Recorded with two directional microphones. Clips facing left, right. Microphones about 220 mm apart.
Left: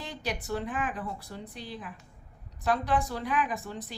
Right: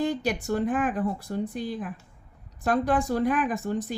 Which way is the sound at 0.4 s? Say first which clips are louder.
Right 8 dB; 45° right (ahead or behind).